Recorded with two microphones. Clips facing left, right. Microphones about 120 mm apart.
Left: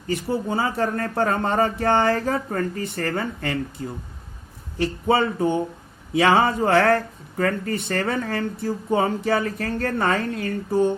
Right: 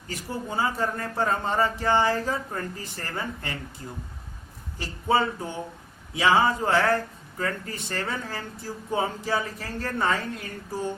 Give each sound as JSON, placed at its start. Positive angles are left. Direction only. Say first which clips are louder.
{"t": 0.1, "sound": "speech", "louder": "left 9 dB", "side_deg": 60}
{"t": 4.8, "sound": "speech", "louder": "left 4 dB", "side_deg": 65}